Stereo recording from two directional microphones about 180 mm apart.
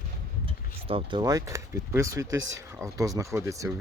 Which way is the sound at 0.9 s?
30° right (ahead or behind).